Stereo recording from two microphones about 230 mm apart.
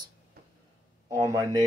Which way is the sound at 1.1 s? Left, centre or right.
Centre.